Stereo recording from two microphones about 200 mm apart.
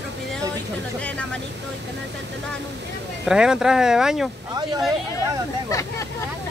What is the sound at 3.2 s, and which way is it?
Speech, 5° right (ahead or behind).